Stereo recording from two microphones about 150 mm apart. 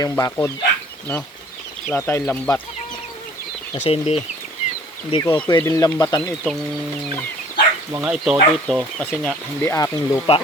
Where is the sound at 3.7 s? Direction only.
40° left (ahead or behind).